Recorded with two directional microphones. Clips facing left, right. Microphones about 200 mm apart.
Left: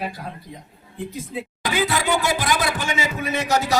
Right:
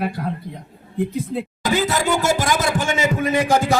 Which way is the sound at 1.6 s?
45° right (ahead or behind).